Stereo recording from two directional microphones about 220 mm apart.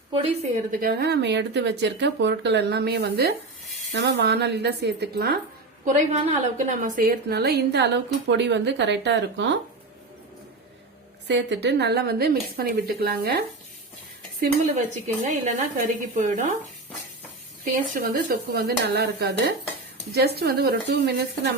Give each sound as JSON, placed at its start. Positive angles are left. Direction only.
{"t": 0.1, "sound": "a woman's voice", "side_deg": -25}
{"t": 0.7, "sound": "speech", "side_deg": -45}
{"t": 5.8, "sound": "a woman's voice", "side_deg": -30}
{"t": 6.8, "sound": "speech", "side_deg": -40}
{"t": 11.3, "sound": "speech", "side_deg": -50}
{"t": 14.4, "sound": "a woman's voice", "side_deg": -35}
{"t": 17.7, "sound": "a woman's voice", "side_deg": -40}